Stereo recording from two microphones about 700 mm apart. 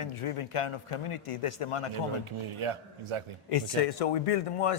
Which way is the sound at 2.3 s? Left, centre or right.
Right.